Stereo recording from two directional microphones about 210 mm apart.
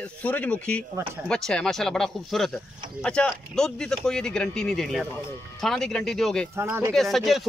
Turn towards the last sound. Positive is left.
turn(degrees=0)  # may be behind; listen again after turning